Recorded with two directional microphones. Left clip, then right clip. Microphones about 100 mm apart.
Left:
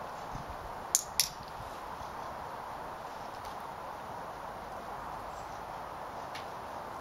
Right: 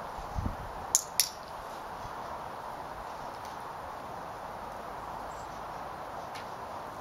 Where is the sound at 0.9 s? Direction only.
Centre (ahead or behind).